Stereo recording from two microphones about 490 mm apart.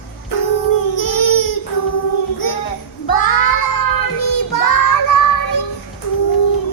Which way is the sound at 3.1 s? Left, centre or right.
Left.